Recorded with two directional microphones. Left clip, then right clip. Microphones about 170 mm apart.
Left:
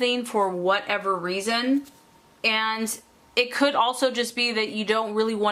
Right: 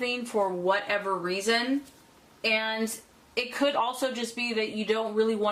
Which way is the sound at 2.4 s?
25° left (ahead or behind).